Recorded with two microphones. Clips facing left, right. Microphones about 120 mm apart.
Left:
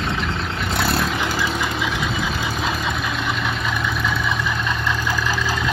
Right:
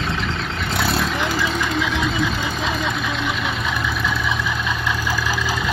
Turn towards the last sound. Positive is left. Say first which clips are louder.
# even
turn(degrees=-5)  # may be behind; listen again after turning